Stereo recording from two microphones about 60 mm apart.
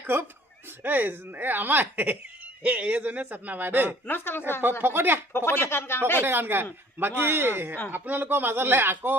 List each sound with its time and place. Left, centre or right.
0.0 s a man's voice: right
4.0 s a woman's voice: left
4.8 s speech: right
5.5 s a woman's voice: left
6.2 s speech: right